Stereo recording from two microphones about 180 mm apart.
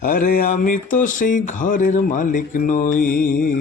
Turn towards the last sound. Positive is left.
turn(degrees=50)  # may be behind; listen again after turning